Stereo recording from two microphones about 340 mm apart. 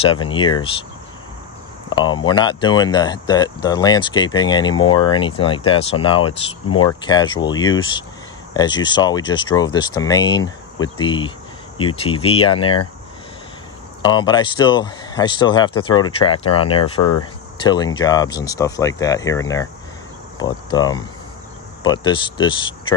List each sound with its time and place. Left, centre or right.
0.0 s speech: centre
2.0 s speech: centre
14.0 s speech: centre
20.3 s cricket: centre
21.8 s speech: centre